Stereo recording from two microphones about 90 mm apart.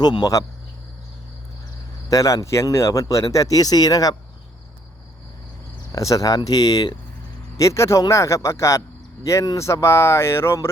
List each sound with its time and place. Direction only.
0.0 s speech: 50° left (ahead or behind)
2.0 s speech: 40° left (ahead or behind)
5.9 s speech: 40° left (ahead or behind); by 7.0 s 55° left (ahead or behind)
7.5 s speech: 35° left (ahead or behind)